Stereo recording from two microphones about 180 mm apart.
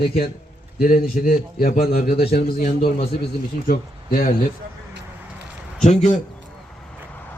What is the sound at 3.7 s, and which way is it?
Speech, 50° left (ahead or behind).